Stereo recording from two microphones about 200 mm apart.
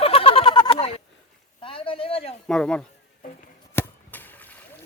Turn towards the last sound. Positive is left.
turn(degrees=10)  # may be behind; listen again after turning